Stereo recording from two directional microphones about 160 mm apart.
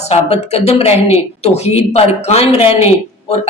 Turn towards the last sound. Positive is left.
turn(degrees=40)  # may be behind; listen again after turning